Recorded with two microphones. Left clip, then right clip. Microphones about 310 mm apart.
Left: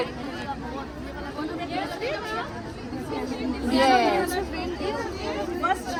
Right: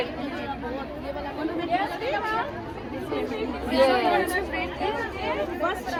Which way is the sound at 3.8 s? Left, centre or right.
Left.